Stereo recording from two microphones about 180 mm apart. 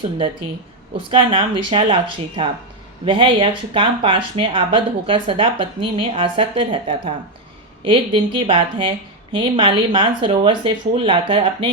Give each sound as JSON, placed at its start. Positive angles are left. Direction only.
{"t": 1.1, "sound": "speech", "side_deg": -30}